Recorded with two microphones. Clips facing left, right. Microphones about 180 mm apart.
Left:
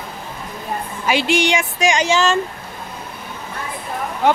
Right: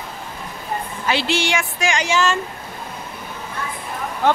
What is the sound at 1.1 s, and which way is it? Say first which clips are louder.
Speech: left 4 dB; 15° left (ahead or behind).